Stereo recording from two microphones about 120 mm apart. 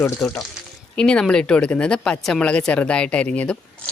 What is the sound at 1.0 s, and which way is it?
Speech, 10° left (ahead or behind).